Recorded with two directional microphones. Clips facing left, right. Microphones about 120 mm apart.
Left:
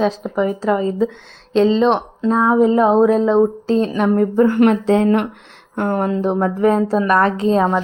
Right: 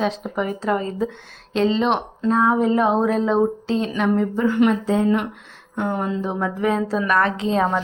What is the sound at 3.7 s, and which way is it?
Speech, 40° left (ahead or behind).